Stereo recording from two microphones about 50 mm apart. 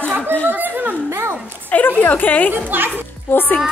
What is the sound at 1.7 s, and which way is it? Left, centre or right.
Speech, left.